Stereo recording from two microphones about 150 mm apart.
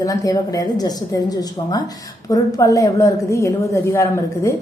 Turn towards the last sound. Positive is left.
turn(degrees=20)  # may be behind; listen again after turning